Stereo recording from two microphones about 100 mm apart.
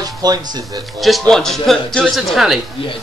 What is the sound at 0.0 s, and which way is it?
Speech, 40° right (ahead or behind).